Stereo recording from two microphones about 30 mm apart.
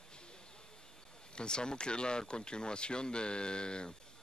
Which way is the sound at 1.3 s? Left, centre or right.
Left.